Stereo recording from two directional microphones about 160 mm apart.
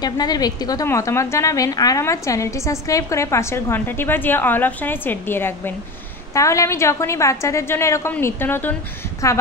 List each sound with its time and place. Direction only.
0.0 s a woman's voice: 25° left (ahead or behind)